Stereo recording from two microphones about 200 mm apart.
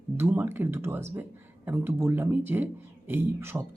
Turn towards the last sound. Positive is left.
turn(degrees=-10)  # may be behind; listen again after turning